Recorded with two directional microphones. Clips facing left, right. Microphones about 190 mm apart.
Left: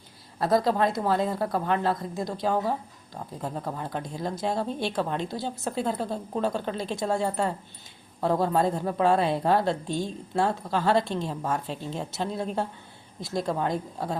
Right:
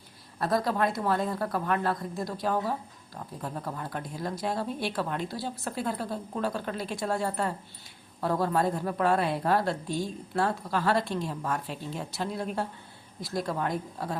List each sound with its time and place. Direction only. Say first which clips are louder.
0.3 s a woman's voice: left 4 dB; 25° left (ahead or behind)